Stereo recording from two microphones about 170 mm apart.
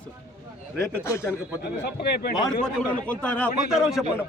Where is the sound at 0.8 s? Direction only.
15° left (ahead or behind).